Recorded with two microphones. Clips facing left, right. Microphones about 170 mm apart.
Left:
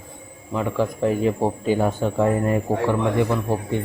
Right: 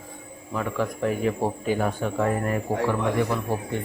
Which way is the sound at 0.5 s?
25° left (ahead or behind).